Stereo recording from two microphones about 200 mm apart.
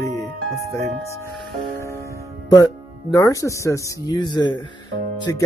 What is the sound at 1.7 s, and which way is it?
Music, 15° left (ahead or behind).